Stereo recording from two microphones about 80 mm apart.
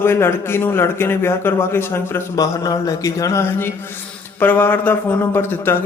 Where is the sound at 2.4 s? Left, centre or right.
Left.